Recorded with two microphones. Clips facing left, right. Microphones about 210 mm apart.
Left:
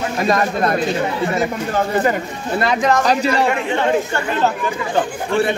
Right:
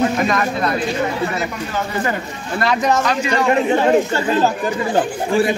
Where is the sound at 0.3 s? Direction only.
40° left (ahead or behind).